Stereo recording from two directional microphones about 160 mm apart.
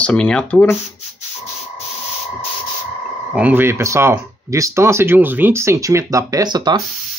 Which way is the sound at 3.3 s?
10° right (ahead or behind).